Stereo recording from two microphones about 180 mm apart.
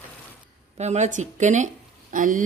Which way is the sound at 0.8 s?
40° right (ahead or behind).